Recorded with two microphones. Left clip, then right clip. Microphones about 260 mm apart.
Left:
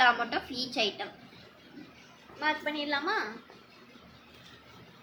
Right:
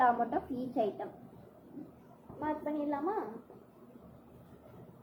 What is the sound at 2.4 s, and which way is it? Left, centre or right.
Speech, left.